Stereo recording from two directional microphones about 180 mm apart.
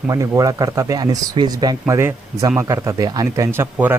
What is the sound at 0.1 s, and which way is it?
Speech, 20° right (ahead or behind).